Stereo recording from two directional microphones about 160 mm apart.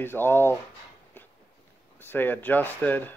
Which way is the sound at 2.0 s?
10° left (ahead or behind).